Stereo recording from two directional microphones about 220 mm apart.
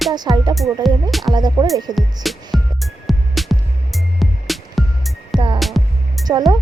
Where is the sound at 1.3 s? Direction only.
20° right (ahead or behind).